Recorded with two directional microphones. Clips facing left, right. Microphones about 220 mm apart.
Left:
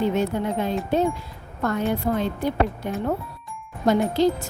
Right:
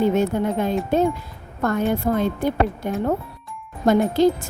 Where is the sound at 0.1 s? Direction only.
50° right (ahead or behind).